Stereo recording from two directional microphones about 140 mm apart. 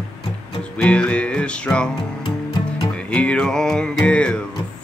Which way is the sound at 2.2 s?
35° left (ahead or behind).